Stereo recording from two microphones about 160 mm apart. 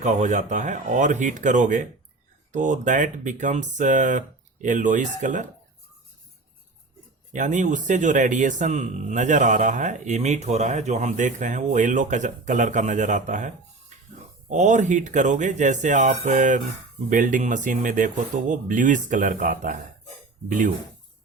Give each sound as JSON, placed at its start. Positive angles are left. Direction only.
{"t": 0.0, "sound": "speech", "side_deg": -50}
{"t": 7.3, "sound": "speech", "side_deg": -50}
{"t": 13.9, "sound": "music", "side_deg": -50}
{"t": 14.5, "sound": "speech", "side_deg": -50}